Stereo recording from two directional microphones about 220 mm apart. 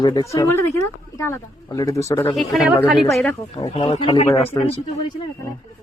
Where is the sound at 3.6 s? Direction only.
25° left (ahead or behind).